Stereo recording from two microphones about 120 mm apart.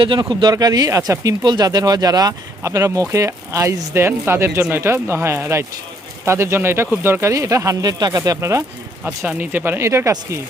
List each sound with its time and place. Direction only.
0.0 s speech: 40° right (ahead or behind); by 8.6 s 25° right (ahead or behind)
9.0 s speech: 10° right (ahead or behind)